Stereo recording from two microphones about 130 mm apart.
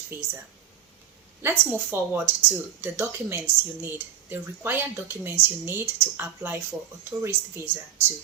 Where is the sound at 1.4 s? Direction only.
15° right (ahead or behind).